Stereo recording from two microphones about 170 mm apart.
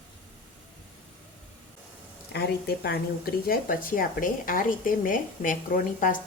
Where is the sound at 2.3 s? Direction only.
70° left (ahead or behind).